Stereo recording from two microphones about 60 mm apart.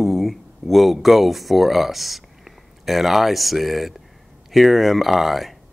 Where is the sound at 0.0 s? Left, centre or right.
Centre.